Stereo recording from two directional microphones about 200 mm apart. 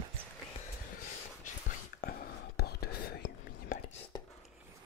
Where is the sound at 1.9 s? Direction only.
50° left (ahead or behind).